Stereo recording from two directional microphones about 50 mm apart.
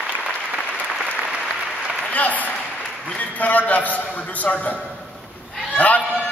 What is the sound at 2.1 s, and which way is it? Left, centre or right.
A man's voice, left.